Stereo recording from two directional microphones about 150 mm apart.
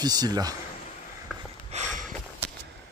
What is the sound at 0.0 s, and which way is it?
Speech, 25° right (ahead or behind).